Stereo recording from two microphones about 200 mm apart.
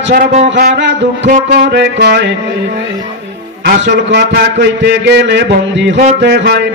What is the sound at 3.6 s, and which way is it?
A man's voice, 65° right (ahead or behind).